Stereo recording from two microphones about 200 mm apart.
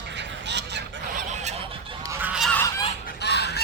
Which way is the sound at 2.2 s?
5° right (ahead or behind).